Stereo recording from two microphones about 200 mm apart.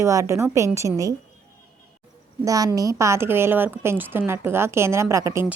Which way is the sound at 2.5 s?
20° right (ahead or behind).